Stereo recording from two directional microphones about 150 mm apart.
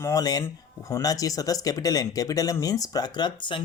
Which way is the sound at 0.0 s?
25° left (ahead or behind).